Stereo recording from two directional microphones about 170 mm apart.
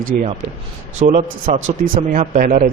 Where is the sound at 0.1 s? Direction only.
50° right (ahead or behind).